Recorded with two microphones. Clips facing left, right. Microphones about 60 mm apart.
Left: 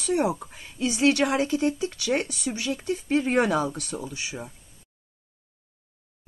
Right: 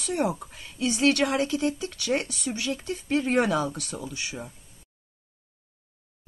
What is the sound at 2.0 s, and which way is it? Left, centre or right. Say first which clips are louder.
Speech: even; centre.